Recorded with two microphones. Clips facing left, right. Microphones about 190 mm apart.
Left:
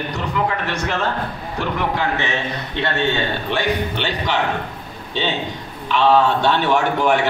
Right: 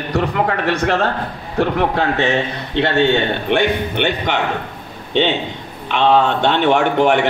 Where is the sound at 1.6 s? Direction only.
60° right (ahead or behind).